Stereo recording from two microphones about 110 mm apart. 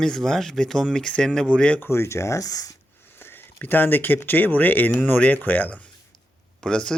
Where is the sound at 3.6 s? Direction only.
15° left (ahead or behind).